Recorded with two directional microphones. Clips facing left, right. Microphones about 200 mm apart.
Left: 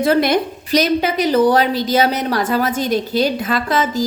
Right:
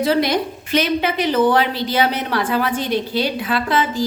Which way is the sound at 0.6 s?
40° left (ahead or behind).